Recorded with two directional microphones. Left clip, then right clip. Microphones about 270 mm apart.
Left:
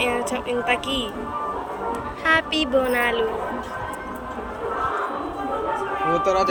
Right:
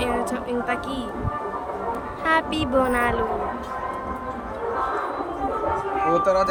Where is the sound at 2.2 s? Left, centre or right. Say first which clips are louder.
Left 2 dB; centre.